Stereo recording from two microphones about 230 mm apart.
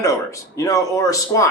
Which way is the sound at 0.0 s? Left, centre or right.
Centre.